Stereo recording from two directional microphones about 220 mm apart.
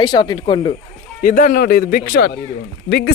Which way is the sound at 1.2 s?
35° left (ahead or behind).